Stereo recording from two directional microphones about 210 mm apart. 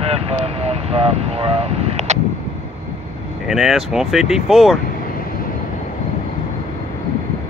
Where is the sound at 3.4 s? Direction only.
Centre (ahead or behind).